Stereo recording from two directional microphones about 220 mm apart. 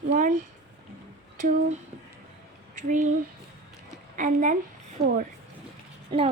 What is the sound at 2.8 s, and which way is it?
Speech, 35° right (ahead or behind).